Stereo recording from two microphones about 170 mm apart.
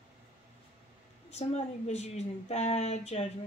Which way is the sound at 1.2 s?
40° left (ahead or behind).